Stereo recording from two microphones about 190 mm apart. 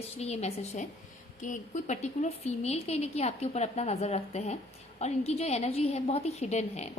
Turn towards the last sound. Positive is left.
turn(degrees=35)  # may be behind; listen again after turning